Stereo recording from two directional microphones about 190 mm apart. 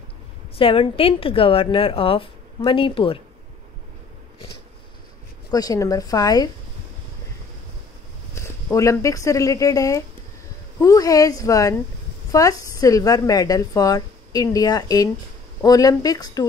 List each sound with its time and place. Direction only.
0.6 s a woman's voice: 30° left (ahead or behind)
5.5 s a woman's voice: 20° left (ahead or behind)
8.4 s a woman's voice: 15° left (ahead or behind)